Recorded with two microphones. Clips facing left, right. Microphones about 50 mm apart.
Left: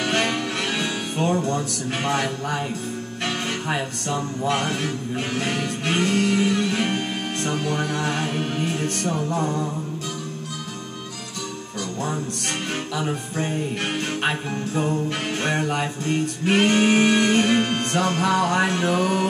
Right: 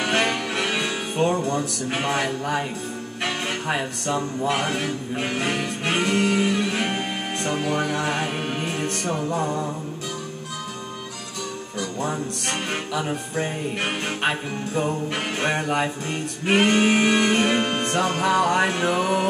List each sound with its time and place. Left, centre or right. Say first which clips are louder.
0.0 s music: even; centre
3.6 s music: right 1 dB; centre
12.9 s music: right 1 dB; centre